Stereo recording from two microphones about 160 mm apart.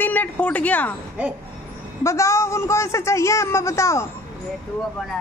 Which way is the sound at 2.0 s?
15° left (ahead or behind).